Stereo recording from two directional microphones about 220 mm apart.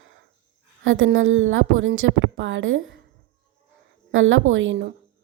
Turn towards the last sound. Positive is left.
turn(degrees=-55)  # may be behind; listen again after turning